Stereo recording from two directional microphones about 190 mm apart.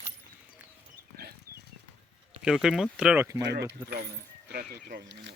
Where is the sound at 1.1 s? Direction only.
55° right (ahead or behind).